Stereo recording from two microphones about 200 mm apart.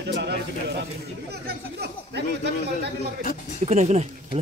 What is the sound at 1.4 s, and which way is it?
A man's voice, 55° right (ahead or behind).